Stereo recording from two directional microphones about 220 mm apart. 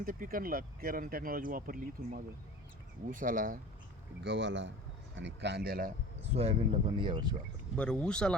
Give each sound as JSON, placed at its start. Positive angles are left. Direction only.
{"t": 0.0, "sound": "speech", "side_deg": -40}
{"t": 4.2, "sound": "speech", "side_deg": -55}
{"t": 6.3, "sound": "speech", "side_deg": -25}
{"t": 7.8, "sound": "speech", "side_deg": 5}